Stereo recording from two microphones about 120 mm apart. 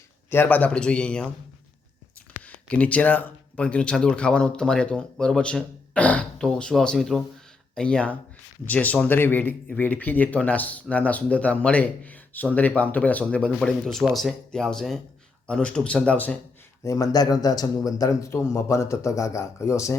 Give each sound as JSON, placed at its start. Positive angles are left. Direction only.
{"t": 0.3, "sound": "speech", "side_deg": 15}
{"t": 2.4, "sound": "speech", "side_deg": 10}
{"t": 16.8, "sound": "a man's voice", "side_deg": 30}